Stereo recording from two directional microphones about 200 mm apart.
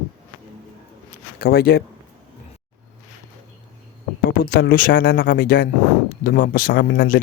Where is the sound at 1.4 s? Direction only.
50° left (ahead or behind).